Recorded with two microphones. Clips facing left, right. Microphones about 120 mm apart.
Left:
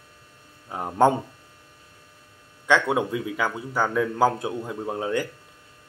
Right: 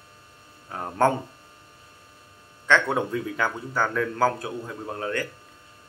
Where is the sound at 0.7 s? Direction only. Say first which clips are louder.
Left 2 dB; 15° left (ahead or behind).